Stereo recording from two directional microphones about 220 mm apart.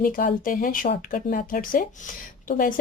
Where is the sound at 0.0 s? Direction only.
40° left (ahead or behind).